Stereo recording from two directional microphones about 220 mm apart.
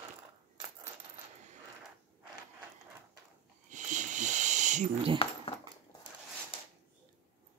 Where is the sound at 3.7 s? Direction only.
35° right (ahead or behind).